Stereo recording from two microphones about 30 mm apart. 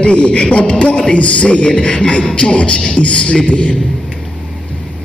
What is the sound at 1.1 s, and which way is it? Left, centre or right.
Speech, left.